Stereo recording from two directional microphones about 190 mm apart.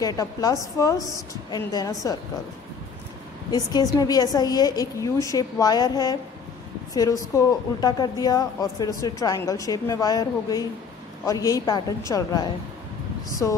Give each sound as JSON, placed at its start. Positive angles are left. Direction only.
{"t": 0.0, "sound": "a woman's voice", "side_deg": 20}
{"t": 3.5, "sound": "a woman's voice", "side_deg": 20}